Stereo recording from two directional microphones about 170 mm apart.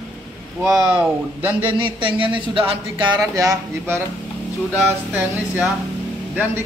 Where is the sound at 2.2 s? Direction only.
30° right (ahead or behind).